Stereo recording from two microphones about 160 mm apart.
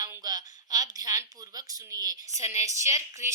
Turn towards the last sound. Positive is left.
turn(degrees=-20)  # may be behind; listen again after turning